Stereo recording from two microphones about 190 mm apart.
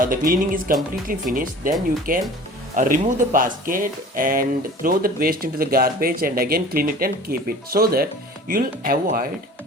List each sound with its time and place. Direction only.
0.0 s speech: 45° right (ahead or behind)